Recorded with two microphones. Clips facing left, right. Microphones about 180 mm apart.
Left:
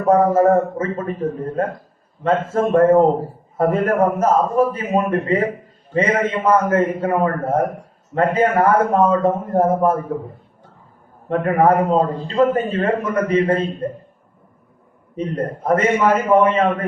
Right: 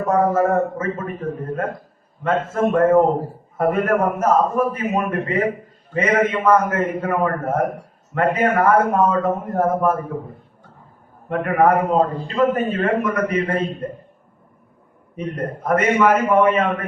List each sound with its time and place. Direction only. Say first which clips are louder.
0.1 s a man's voice: left 4 dB; 30° left (ahead or behind)
11.3 s a man's voice: left 1 dB; 30° left (ahead or behind)
15.1 s a man's voice: left 3 dB; 30° left (ahead or behind)